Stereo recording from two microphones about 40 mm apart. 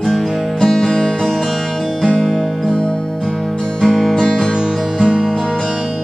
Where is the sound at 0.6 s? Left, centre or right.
Centre.